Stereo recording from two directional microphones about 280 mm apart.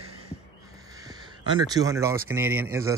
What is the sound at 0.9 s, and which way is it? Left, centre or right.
Speech, centre.